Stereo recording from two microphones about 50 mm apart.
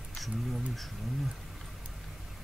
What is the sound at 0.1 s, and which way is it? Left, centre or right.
Speech, centre.